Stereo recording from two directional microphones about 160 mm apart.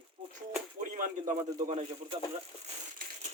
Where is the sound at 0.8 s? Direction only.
50° right (ahead or behind).